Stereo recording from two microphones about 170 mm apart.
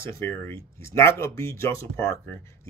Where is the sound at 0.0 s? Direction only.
15° left (ahead or behind).